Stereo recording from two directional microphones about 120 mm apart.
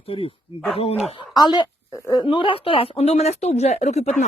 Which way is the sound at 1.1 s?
35° left (ahead or behind).